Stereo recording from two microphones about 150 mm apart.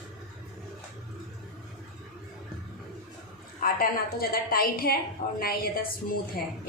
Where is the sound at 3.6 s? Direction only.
75° left (ahead or behind).